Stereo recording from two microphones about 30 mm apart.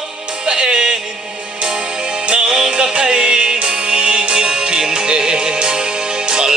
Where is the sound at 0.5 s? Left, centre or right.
Right.